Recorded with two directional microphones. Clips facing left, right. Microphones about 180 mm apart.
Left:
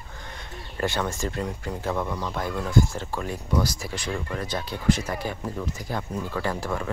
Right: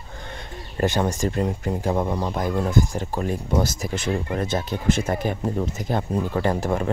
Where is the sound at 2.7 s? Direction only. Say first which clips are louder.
Right 1 dB; 15° right (ahead or behind).